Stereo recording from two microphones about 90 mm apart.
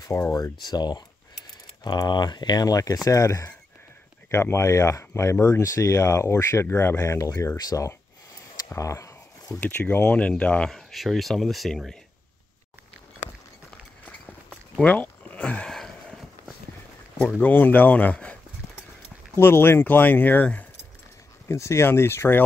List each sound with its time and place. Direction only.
0.3 s speech: 50° left (ahead or behind)
8.6 s a sound: 35° left (ahead or behind)
9.6 s speech: 20° left (ahead or behind)
10.9 s speech: centre (ahead or behind)
14.8 s a sound: 15° left (ahead or behind)
17.4 s speech: 20° left (ahead or behind)
19.3 s speech: 25° left (ahead or behind)
21.5 s speech: 35° left (ahead or behind)